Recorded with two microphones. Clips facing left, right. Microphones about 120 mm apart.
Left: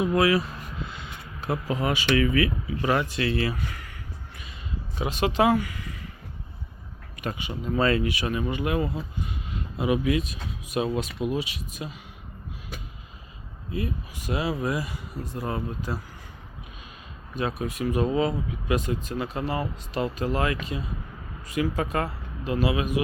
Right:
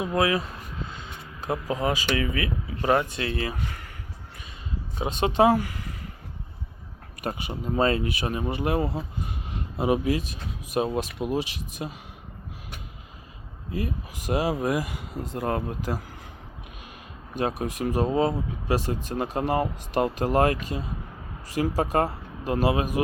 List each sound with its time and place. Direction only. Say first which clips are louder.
0.0 s speech: left 2 dB; 20° right (ahead or behind)
1.5 s speech: even; 20° right (ahead or behind)
1.8 s speech: left 5 dB; 30° right (ahead or behind)
4.9 s speech: right 2 dB; 30° right (ahead or behind)
7.2 s speech: right 1 dB; 45° right (ahead or behind)
7.7 s speech: even; 30° right (ahead or behind); by 11.9 s 45° right (ahead or behind)
13.7 s speech: even; 45° right (ahead or behind)
17.4 s speech: right 1 dB; 45° right (ahead or behind)